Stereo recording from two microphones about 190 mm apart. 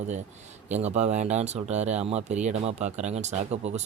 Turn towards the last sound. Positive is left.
turn(degrees=-35)  # may be behind; listen again after turning